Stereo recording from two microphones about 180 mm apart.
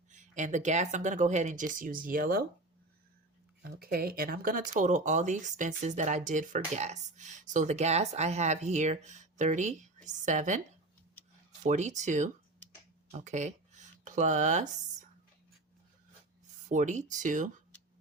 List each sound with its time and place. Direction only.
0.1 s speech: 45° right (ahead or behind)
3.6 s speech: 55° right (ahead or behind)
11.6 s speech: 40° right (ahead or behind)
13.1 s a sound: 40° right (ahead or behind)
16.6 s speech: 45° right (ahead or behind)